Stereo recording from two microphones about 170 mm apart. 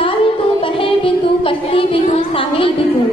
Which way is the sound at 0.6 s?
30° left (ahead or behind).